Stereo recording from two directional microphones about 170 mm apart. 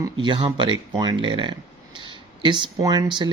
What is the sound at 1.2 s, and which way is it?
Speech, 30° right (ahead or behind).